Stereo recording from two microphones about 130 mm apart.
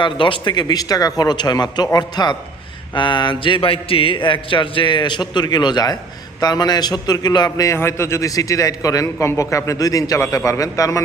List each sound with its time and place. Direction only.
0.0 s a man's voice: 40° left (ahead or behind)